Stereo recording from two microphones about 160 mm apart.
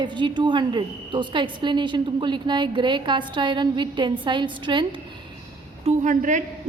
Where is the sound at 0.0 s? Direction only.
30° right (ahead or behind).